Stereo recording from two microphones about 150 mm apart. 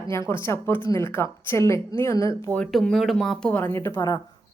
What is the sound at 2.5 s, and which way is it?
A woman's voice, 5° left (ahead or behind).